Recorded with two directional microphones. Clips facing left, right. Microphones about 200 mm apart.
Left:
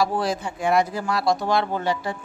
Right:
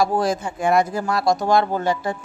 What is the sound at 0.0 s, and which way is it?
Speech, 45° right (ahead or behind).